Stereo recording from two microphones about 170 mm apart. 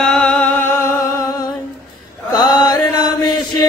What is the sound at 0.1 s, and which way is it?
Music, 5° left (ahead or behind).